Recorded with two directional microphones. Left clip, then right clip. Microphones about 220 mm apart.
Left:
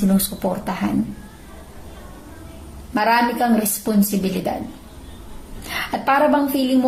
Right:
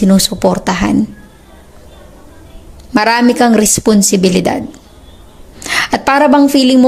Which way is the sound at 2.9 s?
45° right (ahead or behind).